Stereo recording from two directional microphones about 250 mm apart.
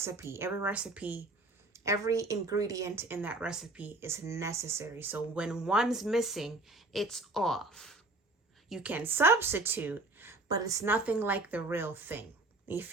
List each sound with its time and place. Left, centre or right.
0.0 s a woman's voice: centre